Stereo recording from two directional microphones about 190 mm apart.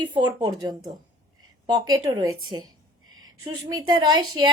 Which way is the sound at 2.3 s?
90° right.